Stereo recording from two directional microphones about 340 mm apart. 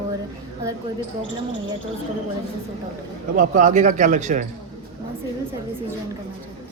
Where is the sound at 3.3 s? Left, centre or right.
Right.